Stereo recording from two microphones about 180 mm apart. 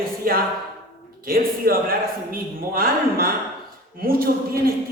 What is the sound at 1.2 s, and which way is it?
A man's voice, 55° right (ahead or behind).